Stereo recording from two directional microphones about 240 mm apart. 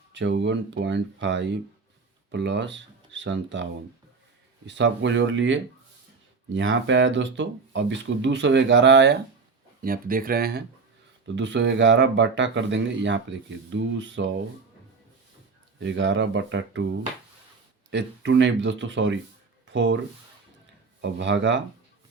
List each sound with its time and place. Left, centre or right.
0.1 s speech: right
15.8 s speech: right
17.9 s speech: right
21.0 s speech: right